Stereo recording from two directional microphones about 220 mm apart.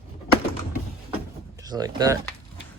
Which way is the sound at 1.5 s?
15° right (ahead or behind).